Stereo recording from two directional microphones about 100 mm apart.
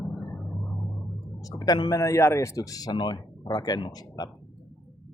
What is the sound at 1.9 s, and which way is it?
Speech, 30° left (ahead or behind).